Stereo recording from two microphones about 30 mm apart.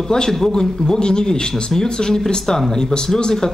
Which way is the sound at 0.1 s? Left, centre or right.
Centre.